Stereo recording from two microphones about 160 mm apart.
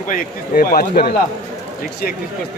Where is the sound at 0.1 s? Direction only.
60° left (ahead or behind).